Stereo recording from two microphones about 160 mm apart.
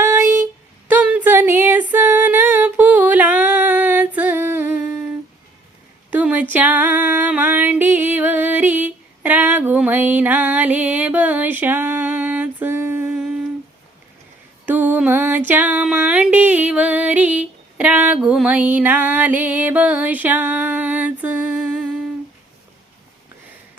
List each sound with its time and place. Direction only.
0.0 s a sound: 15° right (ahead or behind)
0.9 s female singing: 10° right (ahead or behind)
6.1 s a sound: 10° right (ahead or behind)
6.5 s music: 10° right (ahead or behind)
13.1 s humming: 5° right (ahead or behind)
14.7 s music: 10° right (ahead or behind)